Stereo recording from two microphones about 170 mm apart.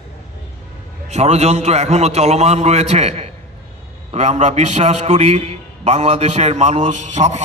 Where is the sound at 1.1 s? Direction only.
40° right (ahead or behind).